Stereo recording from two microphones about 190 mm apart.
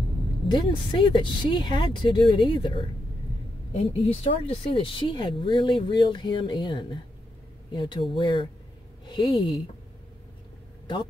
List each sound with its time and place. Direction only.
0.5 s speech: 25° left (ahead or behind)